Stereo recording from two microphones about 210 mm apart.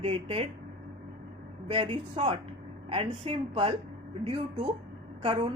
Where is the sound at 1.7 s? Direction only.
25° right (ahead or behind).